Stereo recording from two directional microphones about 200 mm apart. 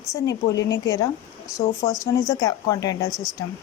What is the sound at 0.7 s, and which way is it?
Speech, 20° left (ahead or behind).